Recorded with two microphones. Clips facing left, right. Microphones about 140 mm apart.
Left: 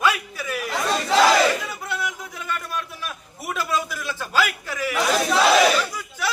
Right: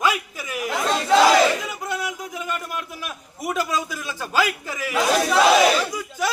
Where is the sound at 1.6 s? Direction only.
15° right (ahead or behind).